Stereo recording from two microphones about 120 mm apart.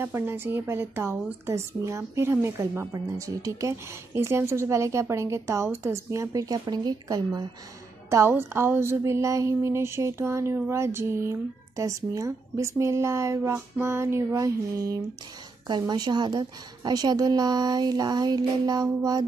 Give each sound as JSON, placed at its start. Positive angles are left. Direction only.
{"t": 0.0, "sound": "a woman's voice", "side_deg": -20}
{"t": 8.1, "sound": "a woman's voice", "side_deg": -20}